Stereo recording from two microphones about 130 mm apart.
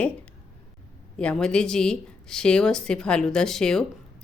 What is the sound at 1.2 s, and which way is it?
A woman's voice, 5° left (ahead or behind).